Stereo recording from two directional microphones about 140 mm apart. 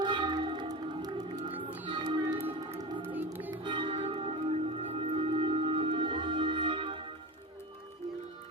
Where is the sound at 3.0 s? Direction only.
10° right (ahead or behind).